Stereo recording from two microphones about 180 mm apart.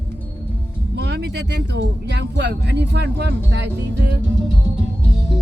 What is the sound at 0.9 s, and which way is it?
Speech, 65° right (ahead or behind).